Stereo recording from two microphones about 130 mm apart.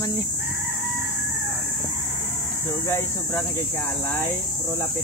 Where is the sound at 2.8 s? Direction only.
20° left (ahead or behind).